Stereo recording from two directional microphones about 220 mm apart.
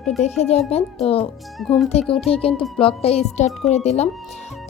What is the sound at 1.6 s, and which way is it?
Speech, centre (ahead or behind).